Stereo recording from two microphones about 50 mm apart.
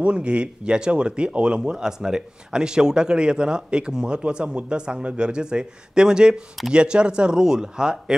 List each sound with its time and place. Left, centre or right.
0.0 s speech: right